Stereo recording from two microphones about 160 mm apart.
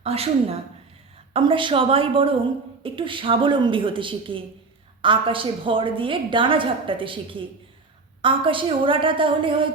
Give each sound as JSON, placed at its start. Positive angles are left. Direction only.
{"t": 0.0, "sound": "a woman's voice", "side_deg": -40}